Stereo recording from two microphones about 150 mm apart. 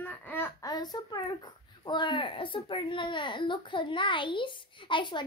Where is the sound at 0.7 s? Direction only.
25° left (ahead or behind).